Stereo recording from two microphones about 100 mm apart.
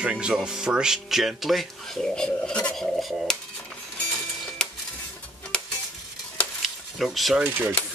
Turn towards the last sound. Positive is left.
turn(degrees=-15)  # may be behind; listen again after turning